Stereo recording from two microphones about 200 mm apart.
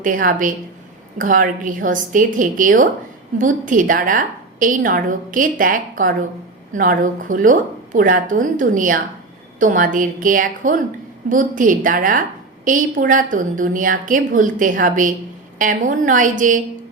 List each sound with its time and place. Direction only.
0.0 s a woman's voice: 40° right (ahead or behind)